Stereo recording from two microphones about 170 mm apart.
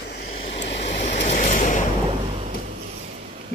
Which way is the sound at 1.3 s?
45° left (ahead or behind).